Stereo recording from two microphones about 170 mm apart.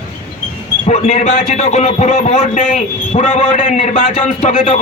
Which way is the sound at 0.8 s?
40° left (ahead or behind).